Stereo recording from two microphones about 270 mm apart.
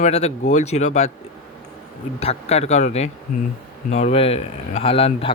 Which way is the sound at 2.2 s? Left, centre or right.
Left.